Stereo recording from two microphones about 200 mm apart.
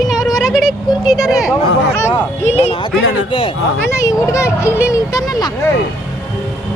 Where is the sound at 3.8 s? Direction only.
15° left (ahead or behind).